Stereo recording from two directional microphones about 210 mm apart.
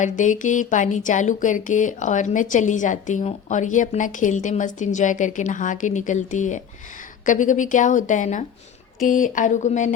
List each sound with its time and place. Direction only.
0.0 s speech: 35° left (ahead or behind)